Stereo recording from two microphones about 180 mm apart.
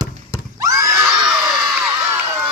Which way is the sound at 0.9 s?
5° right (ahead or behind).